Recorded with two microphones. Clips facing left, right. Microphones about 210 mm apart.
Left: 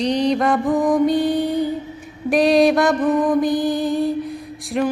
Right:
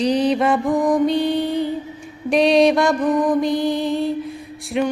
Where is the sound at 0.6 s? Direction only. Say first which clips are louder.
Left 1 dB; 20° left (ahead or behind).